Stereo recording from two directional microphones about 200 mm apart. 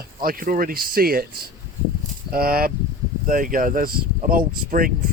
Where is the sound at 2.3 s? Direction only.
50° right (ahead or behind).